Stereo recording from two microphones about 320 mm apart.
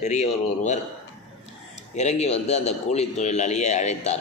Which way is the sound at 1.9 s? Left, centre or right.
Left.